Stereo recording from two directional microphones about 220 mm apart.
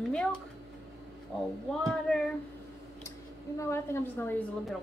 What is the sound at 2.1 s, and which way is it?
A woman's voice, 5° left (ahead or behind).